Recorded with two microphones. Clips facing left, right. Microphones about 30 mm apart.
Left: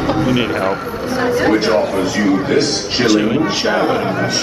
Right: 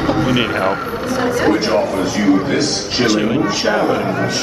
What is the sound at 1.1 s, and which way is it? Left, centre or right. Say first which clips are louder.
Speech: left 1 dB; centre.